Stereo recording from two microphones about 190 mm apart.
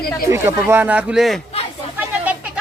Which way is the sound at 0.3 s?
15° right (ahead or behind).